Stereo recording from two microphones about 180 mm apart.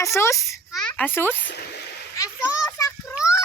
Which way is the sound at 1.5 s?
65° left (ahead or behind).